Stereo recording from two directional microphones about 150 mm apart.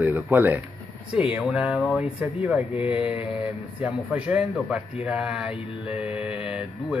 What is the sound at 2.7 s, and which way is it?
Music, 40° left (ahead or behind).